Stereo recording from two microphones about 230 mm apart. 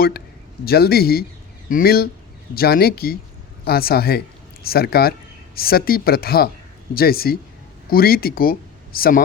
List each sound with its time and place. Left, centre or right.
0.6 s speech: left